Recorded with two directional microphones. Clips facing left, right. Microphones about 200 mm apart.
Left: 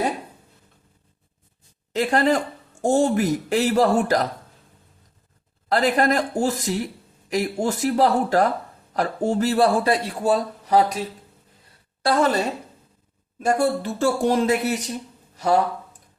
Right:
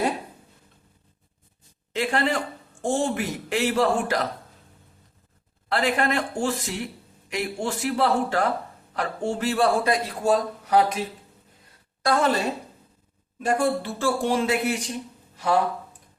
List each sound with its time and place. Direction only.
1.9 s a man's voice: 40° left (ahead or behind)
5.6 s a man's voice: 40° left (ahead or behind)
12.0 s a man's voice: 35° left (ahead or behind)
13.4 s a man's voice: 40° left (ahead or behind)